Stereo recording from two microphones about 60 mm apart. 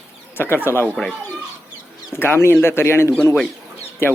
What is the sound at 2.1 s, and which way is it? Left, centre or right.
Speech, left.